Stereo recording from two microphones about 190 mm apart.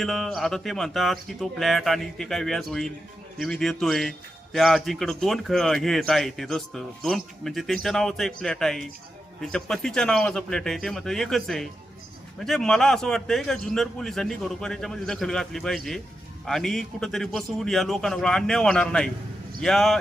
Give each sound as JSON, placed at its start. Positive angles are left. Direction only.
{"t": 0.0, "sound": "a man's voice", "side_deg": 0}